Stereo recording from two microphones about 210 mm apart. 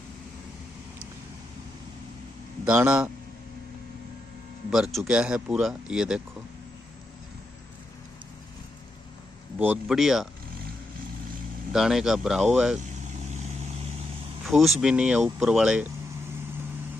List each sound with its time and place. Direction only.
2.6 s speech: 5° right (ahead or behind)
4.9 s speech: 5° right (ahead or behind)
9.6 s speech: 5° right (ahead or behind)
11.7 s speech: centre (ahead or behind)
13.3 s vehicle: 35° right (ahead or behind)
14.4 s speech: centre (ahead or behind)